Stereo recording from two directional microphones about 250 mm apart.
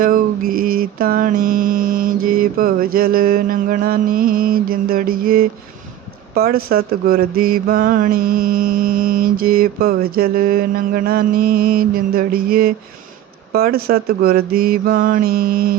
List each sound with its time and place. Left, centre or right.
0.0 s speech: right